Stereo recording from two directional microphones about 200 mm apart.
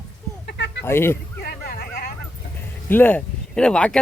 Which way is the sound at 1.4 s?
50° left (ahead or behind).